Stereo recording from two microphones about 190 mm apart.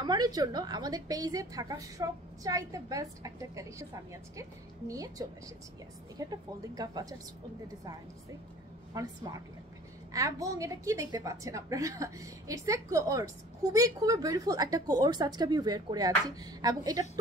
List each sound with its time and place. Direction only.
0.0 s a woman's voice: 20° right (ahead or behind)
6.2 s a woman's voice: 20° right (ahead or behind)
9.0 s a woman's voice: 20° right (ahead or behind)
10.1 s a woman's voice: 15° right (ahead or behind)